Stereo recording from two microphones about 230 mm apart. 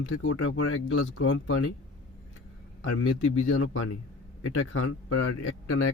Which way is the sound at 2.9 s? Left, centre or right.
Left.